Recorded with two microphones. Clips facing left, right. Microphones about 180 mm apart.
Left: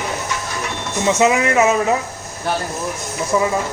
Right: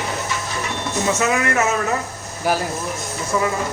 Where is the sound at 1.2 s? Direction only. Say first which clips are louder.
Left 7 dB; 20° left (ahead or behind).